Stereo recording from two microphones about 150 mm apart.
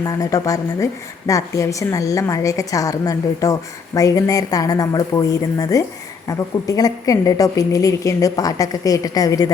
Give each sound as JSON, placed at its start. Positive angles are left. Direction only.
{"t": 0.0, "sound": "a woman's voice", "side_deg": 25}